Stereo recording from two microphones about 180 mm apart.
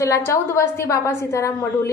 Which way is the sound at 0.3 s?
15° left (ahead or behind).